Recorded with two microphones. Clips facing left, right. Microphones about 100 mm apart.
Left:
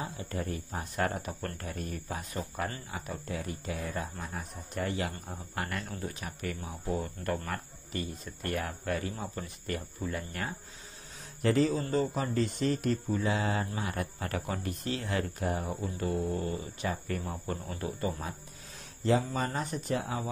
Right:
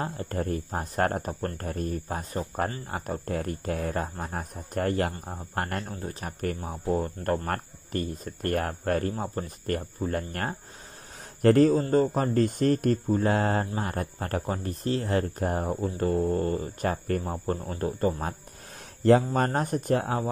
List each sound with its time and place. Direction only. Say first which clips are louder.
0.0 s speech: right 6 dB; 45° right (ahead or behind)
19.0 s speech: right 8 dB; 55° right (ahead or behind)